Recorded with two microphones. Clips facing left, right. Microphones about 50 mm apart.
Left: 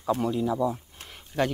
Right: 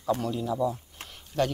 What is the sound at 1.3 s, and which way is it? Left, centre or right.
Speech, left.